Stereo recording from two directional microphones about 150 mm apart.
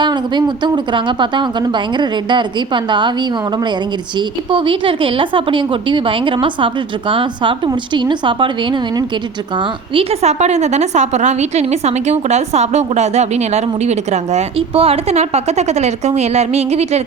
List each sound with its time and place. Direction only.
0.0 s a woman's voice: 30° right (ahead or behind)
4.5 s a woman's voice: 35° right (ahead or behind)
9.9 s a woman's voice: 40° right (ahead or behind)